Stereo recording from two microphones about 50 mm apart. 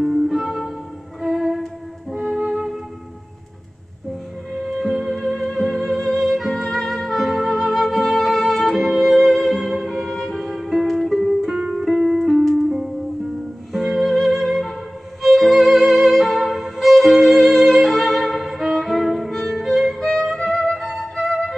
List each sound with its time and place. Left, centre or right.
0.0 s music: centre
2.3 s flute: centre
4.6 s music: centre
11.4 s music: centre
11.7 s music: centre
15.2 s violin: centre
18.6 s music: centre